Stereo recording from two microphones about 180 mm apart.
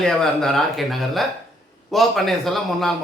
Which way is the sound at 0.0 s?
5° left (ahead or behind).